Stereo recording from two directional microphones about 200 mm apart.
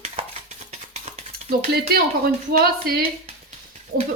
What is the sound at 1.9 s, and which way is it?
Speech, 50° right (ahead or behind).